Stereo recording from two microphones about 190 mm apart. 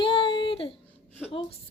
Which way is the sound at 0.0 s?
25° left (ahead or behind).